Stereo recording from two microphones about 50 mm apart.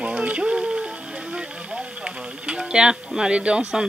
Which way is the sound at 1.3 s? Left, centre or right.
Centre.